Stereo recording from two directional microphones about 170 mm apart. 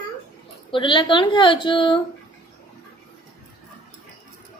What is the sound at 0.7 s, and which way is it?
A woman's voice, 30° left (ahead or behind).